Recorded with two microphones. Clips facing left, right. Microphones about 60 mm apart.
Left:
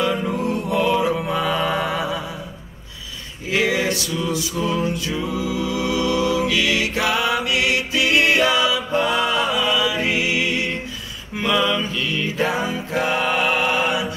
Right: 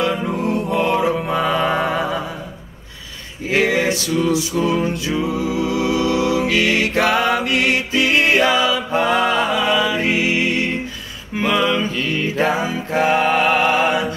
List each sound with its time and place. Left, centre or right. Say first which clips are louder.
0.1 s music: right 1 dB; centre
0.4 s music: right 2 dB; right
3.4 s music: right 3 dB; right
5.3 s music: right 3 dB; right
11.3 s mantra: right 2 dB; right
12.7 s music: right 5 dB; right